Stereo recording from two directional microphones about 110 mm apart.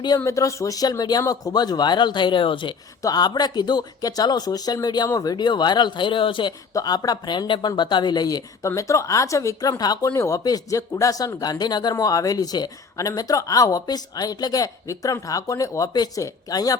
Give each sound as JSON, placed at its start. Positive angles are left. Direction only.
{"t": 0.3, "sound": "speech", "side_deg": 30}
{"t": 3.0, "sound": "speech", "side_deg": 35}
{"t": 6.7, "sound": "speech", "side_deg": 35}